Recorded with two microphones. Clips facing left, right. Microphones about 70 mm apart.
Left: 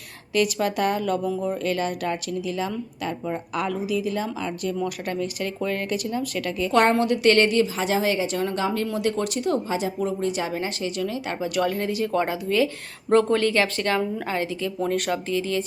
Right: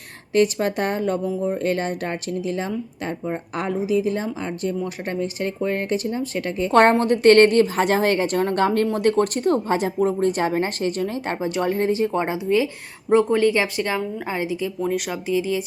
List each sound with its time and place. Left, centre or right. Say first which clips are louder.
0.3 s a woman's voice: right 3 dB; right; by 15.6 s centre